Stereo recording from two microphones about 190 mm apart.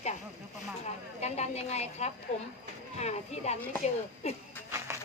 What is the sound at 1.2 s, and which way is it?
A woman's voice, 35° left (ahead or behind).